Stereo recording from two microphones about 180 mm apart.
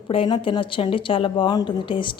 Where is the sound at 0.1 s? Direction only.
30° left (ahead or behind).